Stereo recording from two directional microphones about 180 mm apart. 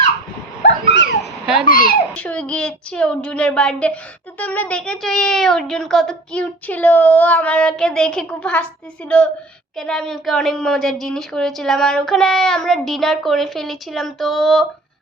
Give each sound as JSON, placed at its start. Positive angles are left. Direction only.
{"t": 0.6, "sound": "dog", "side_deg": 70}
{"t": 1.6, "sound": "speech", "side_deg": 50}
{"t": 2.1, "sound": "a woman's voice", "side_deg": 5}